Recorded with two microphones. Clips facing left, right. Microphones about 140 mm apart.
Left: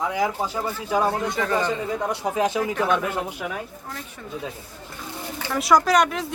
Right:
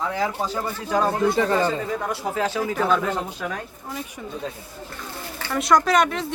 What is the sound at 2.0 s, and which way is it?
Speech, 20° left (ahead or behind).